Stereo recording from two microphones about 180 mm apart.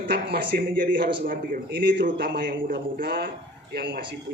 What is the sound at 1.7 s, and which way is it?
A man's voice, 85° right.